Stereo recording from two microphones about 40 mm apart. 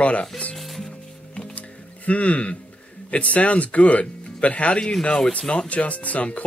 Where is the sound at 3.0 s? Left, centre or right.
Left.